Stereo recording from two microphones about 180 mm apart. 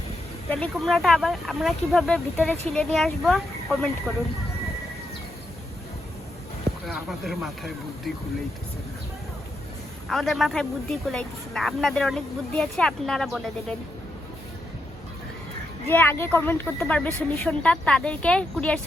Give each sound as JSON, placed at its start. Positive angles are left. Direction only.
{"t": 0.5, "sound": "speech", "side_deg": 5}
{"t": 6.8, "sound": "speech", "side_deg": 0}
{"t": 10.1, "sound": "speech", "side_deg": 0}
{"t": 15.9, "sound": "speech", "side_deg": 10}